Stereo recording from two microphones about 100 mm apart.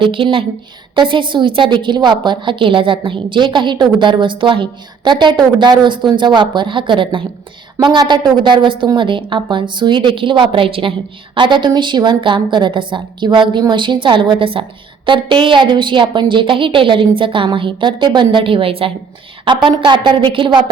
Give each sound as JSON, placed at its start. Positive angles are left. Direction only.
{"t": 0.0, "sound": "a woman's voice", "side_deg": -55}
{"t": 11.3, "sound": "a woman's voice", "side_deg": -50}
{"t": 19.5, "sound": "a woman's voice", "side_deg": -55}